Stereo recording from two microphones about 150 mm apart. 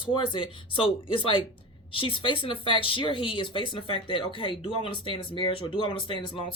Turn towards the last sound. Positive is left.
turn(degrees=35)  # may be behind; listen again after turning